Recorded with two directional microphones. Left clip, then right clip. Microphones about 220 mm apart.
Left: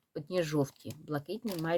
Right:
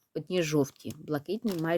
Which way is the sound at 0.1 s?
35° right (ahead or behind).